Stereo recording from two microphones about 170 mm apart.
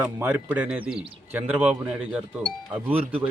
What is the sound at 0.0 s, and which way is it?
Speech, 10° right (ahead or behind).